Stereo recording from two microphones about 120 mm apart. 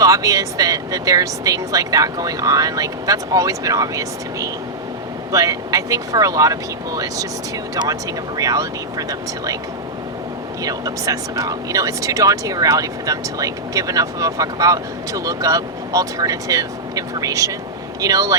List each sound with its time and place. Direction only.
0.0 s speech: 30° right (ahead or behind)
8.4 s speech: 30° right (ahead or behind)
10.6 s speech: 30° right (ahead or behind)